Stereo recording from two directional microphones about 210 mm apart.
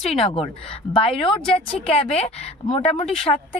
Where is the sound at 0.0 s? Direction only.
30° left (ahead or behind).